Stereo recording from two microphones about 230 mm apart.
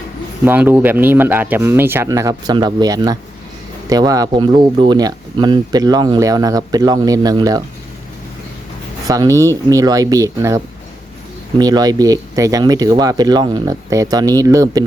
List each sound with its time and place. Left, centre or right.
0.4 s speech: centre
9.0 s speech: centre